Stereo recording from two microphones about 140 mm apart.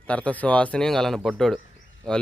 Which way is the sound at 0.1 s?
10° left (ahead or behind).